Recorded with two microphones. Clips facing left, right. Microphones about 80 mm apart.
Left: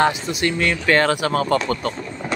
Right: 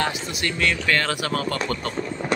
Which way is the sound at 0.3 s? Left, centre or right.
Left.